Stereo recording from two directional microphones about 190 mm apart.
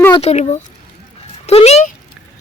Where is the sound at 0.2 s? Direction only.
35° left (ahead or behind).